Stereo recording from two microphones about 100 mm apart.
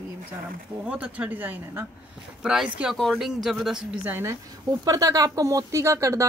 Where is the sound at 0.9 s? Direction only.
15° right (ahead or behind).